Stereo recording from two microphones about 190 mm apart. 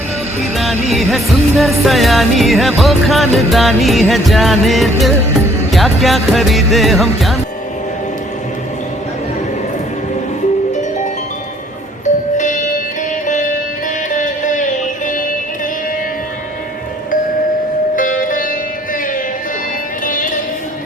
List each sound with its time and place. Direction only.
0.5 s music: centre (ahead or behind)
12.0 s music: 40° left (ahead or behind)
17.9 s music: 45° left (ahead or behind)
20.1 s music: 45° left (ahead or behind)